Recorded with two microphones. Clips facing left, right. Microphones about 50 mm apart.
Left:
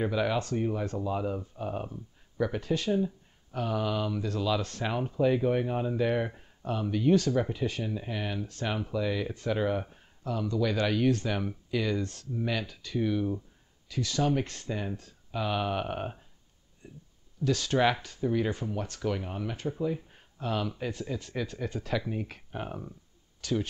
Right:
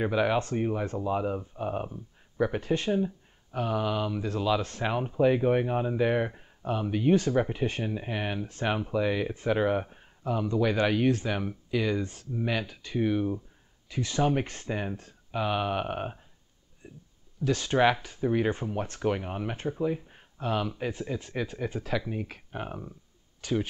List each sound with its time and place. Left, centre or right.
0.0 s speech: centre
3.5 s speech: centre; by 19.7 s right
19.7 s speech: centre
23.4 s speech: centre